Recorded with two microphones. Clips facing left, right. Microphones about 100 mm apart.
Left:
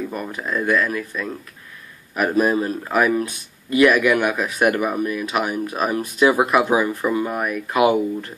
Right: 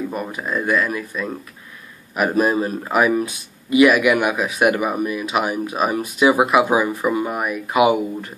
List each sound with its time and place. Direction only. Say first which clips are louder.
0.1 s speech: right 1 dB; 10° right (ahead or behind)
2.4 s speech: even; 15° right (ahead or behind)